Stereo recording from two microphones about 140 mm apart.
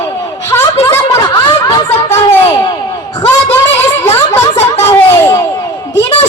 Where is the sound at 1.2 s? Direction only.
30° left (ahead or behind).